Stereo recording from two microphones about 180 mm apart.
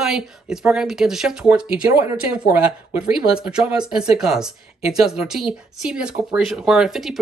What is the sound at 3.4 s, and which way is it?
Speech, 5° right (ahead or behind).